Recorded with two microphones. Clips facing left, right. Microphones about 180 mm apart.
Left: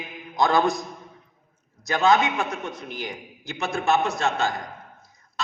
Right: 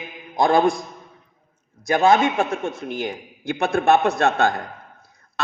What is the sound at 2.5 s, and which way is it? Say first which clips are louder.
Speech: right 6 dB; 25° right (ahead or behind).